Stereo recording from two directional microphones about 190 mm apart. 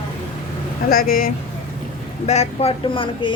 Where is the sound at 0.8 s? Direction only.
50° left (ahead or behind).